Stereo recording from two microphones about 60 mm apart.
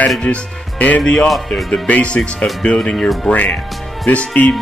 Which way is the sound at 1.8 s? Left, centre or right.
Left.